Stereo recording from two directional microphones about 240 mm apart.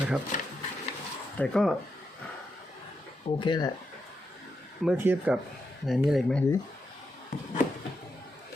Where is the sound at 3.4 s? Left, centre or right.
Centre.